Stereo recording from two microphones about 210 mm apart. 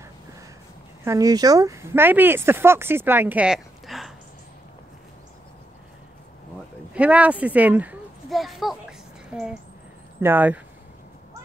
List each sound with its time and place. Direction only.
1.0 s speech: 15° right (ahead or behind); by 4.1 s centre (ahead or behind)
6.9 s speech: 5° right (ahead or behind)